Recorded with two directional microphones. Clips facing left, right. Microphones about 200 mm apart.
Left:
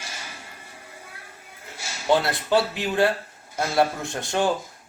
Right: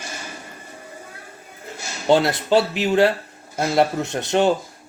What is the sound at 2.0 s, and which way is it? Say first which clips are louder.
Speech: right 4 dB; 20° right (ahead or behind).